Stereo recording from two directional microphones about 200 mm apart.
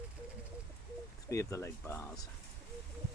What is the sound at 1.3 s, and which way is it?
Speech, 15° left (ahead or behind).